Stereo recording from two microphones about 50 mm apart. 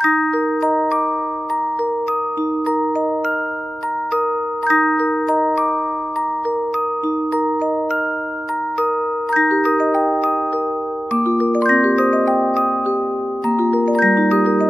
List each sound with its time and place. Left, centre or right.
11.3 s music: left
11.7 s marimba: left
12.4 s music: centre
13.6 s music: left